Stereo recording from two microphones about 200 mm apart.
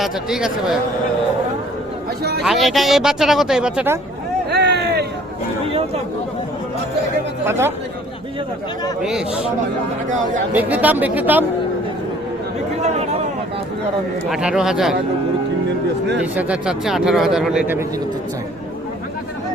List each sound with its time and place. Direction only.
0.0 s speech: centre (ahead or behind)
2.4 s speech: centre (ahead or behind)
4.5 s a sound: 55° right (ahead or behind)
5.6 s a sound: 30° right (ahead or behind)
7.4 s speech: 10° right (ahead or behind)
10.5 s speech: 10° right (ahead or behind)
12.8 s a sound: 30° right (ahead or behind)
14.3 s speech: 5° right (ahead or behind)
16.2 s speech: 5° right (ahead or behind)